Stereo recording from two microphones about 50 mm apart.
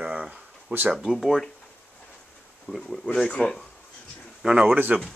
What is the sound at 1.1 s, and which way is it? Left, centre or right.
Speech, centre.